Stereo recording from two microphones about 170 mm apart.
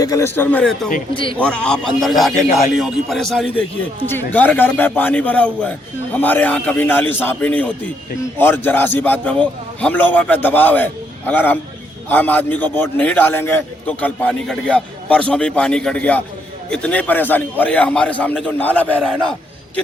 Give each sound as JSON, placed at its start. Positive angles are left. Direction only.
{"t": 0.0, "sound": "a man's voice", "side_deg": 20}
{"t": 1.1, "sound": "a man's voice", "side_deg": 30}
{"t": 1.4, "sound": "a man's voice", "side_deg": 5}